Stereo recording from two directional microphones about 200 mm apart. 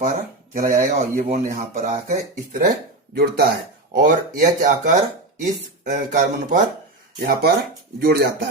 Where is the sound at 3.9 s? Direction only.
40° right (ahead or behind).